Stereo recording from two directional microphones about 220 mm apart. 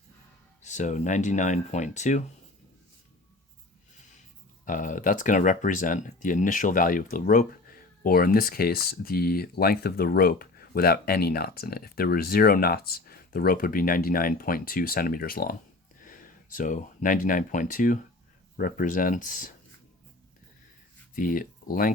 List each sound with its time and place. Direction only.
0.6 s speech: 35° left (ahead or behind)
4.6 s speech: 35° left (ahead or behind)
21.2 s speech: 40° left (ahead or behind)